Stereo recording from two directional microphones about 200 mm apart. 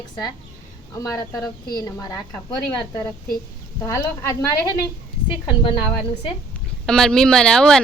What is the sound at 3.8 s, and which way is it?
A woman's voice, 15° left (ahead or behind).